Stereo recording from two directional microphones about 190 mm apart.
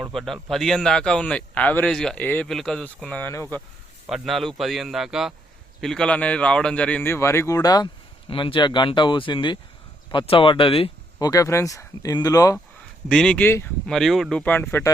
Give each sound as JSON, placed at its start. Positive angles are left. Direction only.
{"t": 0.0, "sound": "speech", "side_deg": 0}
{"t": 4.0, "sound": "a man's voice", "side_deg": 0}
{"t": 11.3, "sound": "a man's voice", "side_deg": 15}
{"t": 13.1, "sound": "speech", "side_deg": 5}
{"t": 13.9, "sound": "speech", "side_deg": 0}